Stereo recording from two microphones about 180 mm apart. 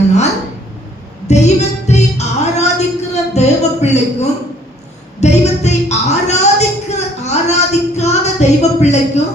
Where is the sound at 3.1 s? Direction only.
35° left (ahead or behind).